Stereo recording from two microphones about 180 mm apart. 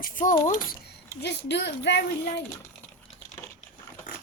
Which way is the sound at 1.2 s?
75° left (ahead or behind).